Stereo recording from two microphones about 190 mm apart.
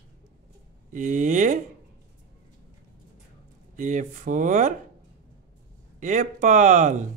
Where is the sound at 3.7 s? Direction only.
40° right (ahead or behind).